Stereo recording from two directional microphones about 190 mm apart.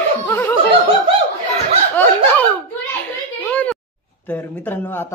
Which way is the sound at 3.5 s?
5° left (ahead or behind).